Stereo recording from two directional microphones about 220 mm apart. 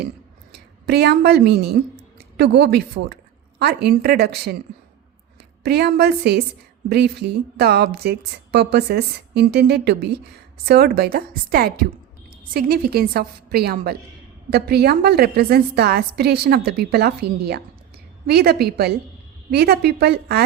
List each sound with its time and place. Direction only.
0.9 s a woman's voice: 45° right (ahead or behind)
5.6 s a woman's voice: 45° right (ahead or behind)